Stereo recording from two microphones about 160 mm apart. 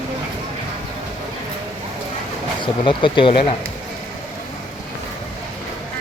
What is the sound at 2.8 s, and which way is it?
Speech, 30° left (ahead or behind).